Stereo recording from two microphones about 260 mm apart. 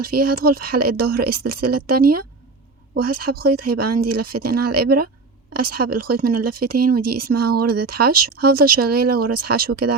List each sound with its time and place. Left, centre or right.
0.0 s speech: right